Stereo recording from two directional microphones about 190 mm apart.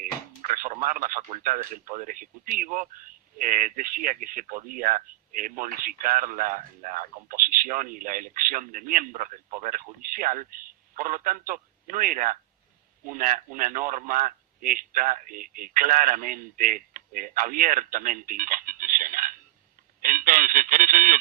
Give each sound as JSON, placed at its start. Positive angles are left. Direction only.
{"t": 0.0, "sound": "a man's voice", "side_deg": -45}
{"t": 20.0, "sound": "telephone", "side_deg": -45}